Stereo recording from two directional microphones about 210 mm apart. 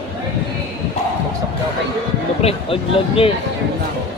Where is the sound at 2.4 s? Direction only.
25° left (ahead or behind).